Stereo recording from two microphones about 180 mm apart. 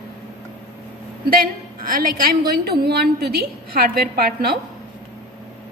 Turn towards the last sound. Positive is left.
turn(degrees=-60)  # may be behind; listen again after turning